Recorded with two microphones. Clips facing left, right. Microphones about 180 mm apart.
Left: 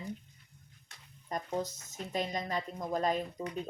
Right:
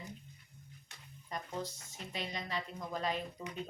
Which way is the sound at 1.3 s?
45° left (ahead or behind).